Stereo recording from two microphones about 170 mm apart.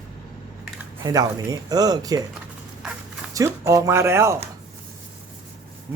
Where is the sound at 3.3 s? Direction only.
20° right (ahead or behind).